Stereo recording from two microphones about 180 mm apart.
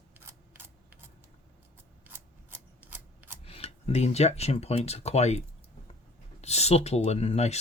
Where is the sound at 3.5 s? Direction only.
35° left (ahead or behind).